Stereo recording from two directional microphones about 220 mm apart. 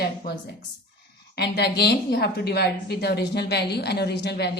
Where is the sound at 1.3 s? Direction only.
50° left (ahead or behind).